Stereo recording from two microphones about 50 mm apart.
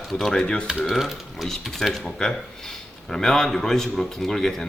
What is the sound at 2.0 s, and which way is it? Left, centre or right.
A man's voice, centre.